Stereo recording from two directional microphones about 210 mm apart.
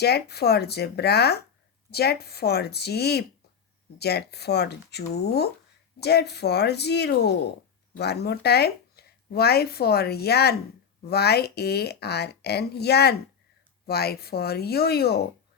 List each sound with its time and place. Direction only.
0.0 s speech: 50° left (ahead or behind)